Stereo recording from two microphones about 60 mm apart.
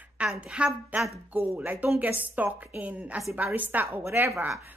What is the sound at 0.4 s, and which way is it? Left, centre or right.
Speech, centre.